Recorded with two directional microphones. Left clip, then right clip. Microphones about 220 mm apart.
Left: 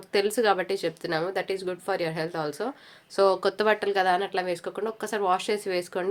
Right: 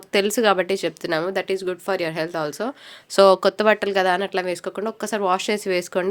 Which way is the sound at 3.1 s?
45° right (ahead or behind).